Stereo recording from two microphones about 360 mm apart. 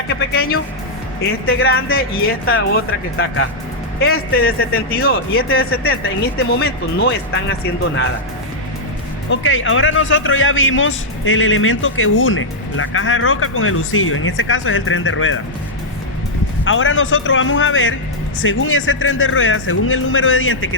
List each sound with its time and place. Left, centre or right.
0.3 s speech: left
9.3 s a man's voice: left
16.6 s a man's voice: left